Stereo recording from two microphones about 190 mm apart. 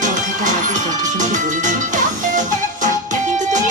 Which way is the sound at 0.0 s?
40° right (ahead or behind).